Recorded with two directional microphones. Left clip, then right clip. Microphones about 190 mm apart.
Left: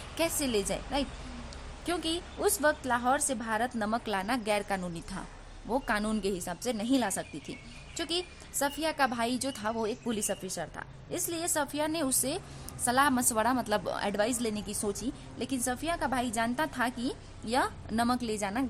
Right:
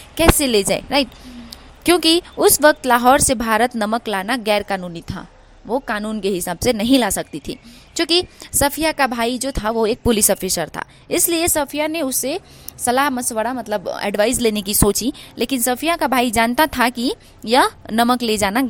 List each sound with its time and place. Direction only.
0.2 s a woman's voice: 40° right (ahead or behind)
6.3 s a woman's voice: 40° right (ahead or behind)
13.2 s a woman's voice: 20° right (ahead or behind); by 18.6 s 45° right (ahead or behind)